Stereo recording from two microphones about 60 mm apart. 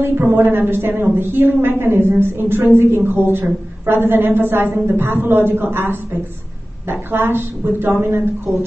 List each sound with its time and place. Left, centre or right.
0.2 s a woman's voice: right